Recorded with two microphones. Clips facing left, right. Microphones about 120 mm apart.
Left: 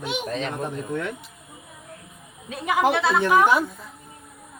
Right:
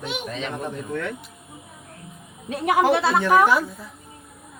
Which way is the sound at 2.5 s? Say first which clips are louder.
Right 4 dB; 45° right (ahead or behind).